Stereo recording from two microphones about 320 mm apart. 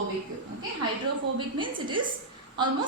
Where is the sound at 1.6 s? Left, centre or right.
Centre.